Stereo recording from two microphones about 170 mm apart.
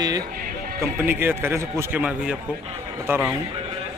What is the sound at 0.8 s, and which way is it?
A man's voice, 10° right (ahead or behind).